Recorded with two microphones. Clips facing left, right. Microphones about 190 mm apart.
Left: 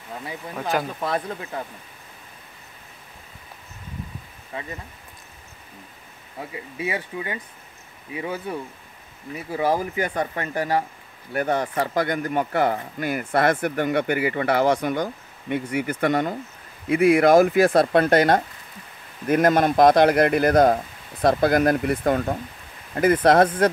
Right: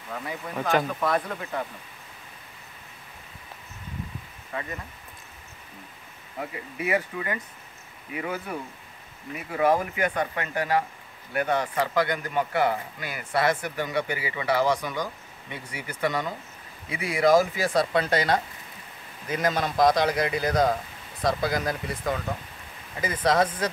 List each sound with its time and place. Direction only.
0.7 s speech: 5° left (ahead or behind)
6.8 s a man's voice: 25° left (ahead or behind); by 23.7 s 55° left (ahead or behind)